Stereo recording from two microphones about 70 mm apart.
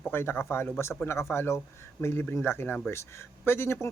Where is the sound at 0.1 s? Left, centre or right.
Left.